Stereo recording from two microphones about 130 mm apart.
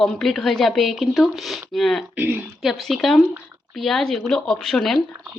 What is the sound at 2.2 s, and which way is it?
Speech, 10° right (ahead or behind).